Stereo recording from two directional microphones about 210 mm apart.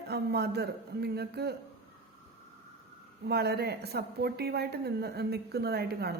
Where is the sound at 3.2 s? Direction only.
50° right (ahead or behind).